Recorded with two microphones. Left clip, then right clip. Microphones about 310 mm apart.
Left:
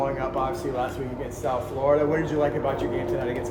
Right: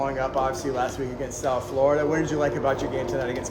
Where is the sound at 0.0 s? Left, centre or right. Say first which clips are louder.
Right 1 dB; right.